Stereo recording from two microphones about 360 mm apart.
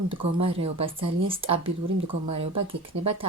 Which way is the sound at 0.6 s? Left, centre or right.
Centre.